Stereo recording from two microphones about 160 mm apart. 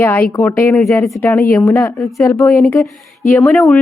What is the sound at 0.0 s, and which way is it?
Speech, 10° left (ahead or behind).